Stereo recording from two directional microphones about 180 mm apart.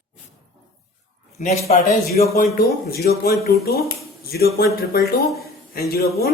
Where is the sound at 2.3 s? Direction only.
55° left (ahead or behind).